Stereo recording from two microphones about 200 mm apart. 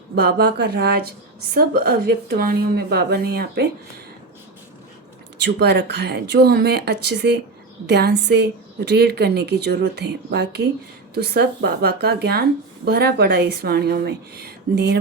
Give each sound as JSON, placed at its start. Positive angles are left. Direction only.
{"t": 0.2, "sound": "speech", "side_deg": -50}
{"t": 5.4, "sound": "a woman's voice", "side_deg": -55}